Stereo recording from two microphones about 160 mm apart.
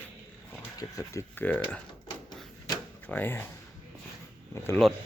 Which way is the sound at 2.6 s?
10° left (ahead or behind).